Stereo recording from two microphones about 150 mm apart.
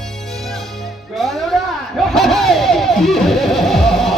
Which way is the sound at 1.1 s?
Centre (ahead or behind).